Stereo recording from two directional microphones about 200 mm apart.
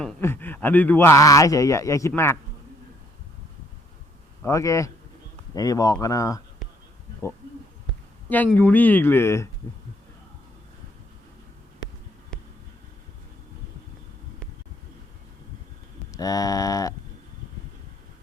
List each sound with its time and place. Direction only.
0.0 s a man's voice: 10° left (ahead or behind)
4.4 s a man's voice: 15° left (ahead or behind)
8.3 s a man's voice: 10° left (ahead or behind)
16.1 s a man's voice: 20° left (ahead or behind)